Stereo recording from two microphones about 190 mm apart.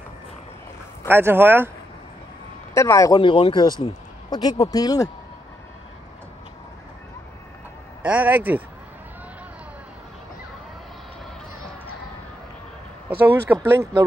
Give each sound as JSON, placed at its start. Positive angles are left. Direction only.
{"t": 1.0, "sound": "speech", "side_deg": -10}
{"t": 2.7, "sound": "speech", "side_deg": 15}
{"t": 3.8, "sound": "a sound", "side_deg": 20}
{"t": 4.6, "sound": "speech", "side_deg": 20}
{"t": 8.0, "sound": "speech", "side_deg": -5}
{"t": 13.1, "sound": "speech", "side_deg": -10}